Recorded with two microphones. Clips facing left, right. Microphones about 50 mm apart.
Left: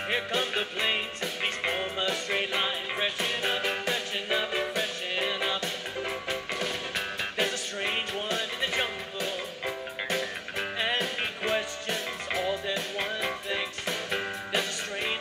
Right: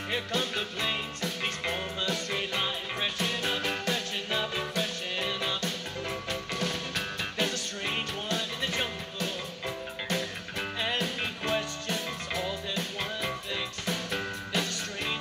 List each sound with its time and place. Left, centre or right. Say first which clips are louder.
0.1 s music: left 2 dB; left